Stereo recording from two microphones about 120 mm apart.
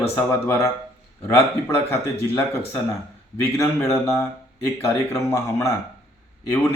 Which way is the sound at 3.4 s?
25° left (ahead or behind).